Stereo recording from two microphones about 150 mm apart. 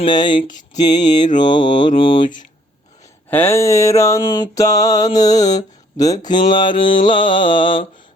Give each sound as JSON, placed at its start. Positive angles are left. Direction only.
{"t": 0.0, "sound": "mantra", "side_deg": 30}
{"t": 3.2, "sound": "mantra", "side_deg": 15}